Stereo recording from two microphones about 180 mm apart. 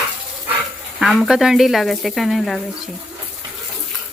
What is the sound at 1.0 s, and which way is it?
Speech, centre (ahead or behind).